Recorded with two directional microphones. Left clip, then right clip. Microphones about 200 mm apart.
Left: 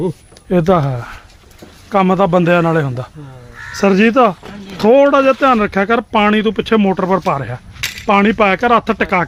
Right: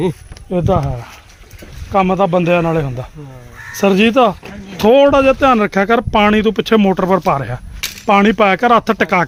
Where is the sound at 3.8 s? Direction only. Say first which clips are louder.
Even; centre (ahead or behind).